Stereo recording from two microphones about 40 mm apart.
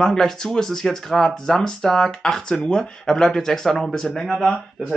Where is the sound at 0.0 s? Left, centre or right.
Centre.